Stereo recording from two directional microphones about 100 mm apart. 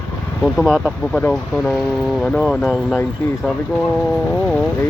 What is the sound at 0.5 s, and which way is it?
Speech, 5° right (ahead or behind).